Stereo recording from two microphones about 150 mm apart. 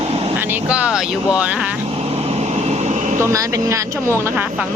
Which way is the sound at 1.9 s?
40° right (ahead or behind).